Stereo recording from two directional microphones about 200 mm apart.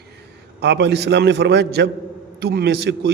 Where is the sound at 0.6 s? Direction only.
55° right (ahead or behind).